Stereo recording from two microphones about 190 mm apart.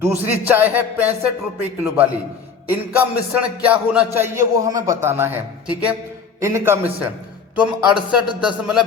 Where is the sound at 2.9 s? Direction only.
10° right (ahead or behind).